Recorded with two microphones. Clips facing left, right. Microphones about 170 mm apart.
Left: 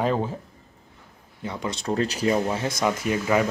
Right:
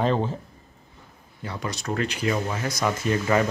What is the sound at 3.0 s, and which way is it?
Speech, 10° left (ahead or behind).